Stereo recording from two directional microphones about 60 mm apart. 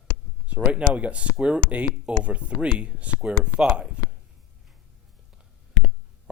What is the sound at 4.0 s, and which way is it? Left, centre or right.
Plop, centre.